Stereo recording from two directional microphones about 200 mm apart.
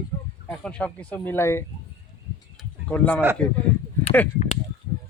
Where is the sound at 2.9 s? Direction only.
5° left (ahead or behind).